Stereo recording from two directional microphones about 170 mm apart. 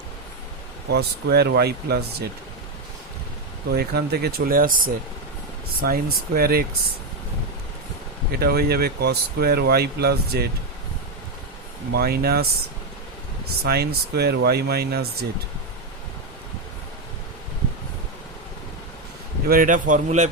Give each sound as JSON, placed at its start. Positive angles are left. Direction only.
{"t": 0.9, "sound": "speech", "side_deg": -70}
{"t": 3.7, "sound": "speech", "side_deg": -65}
{"t": 8.3, "sound": "speech", "side_deg": -65}
{"t": 11.9, "sound": "speech", "side_deg": -65}
{"t": 13.7, "sound": "speech", "side_deg": -70}
{"t": 19.5, "sound": "speech", "side_deg": -55}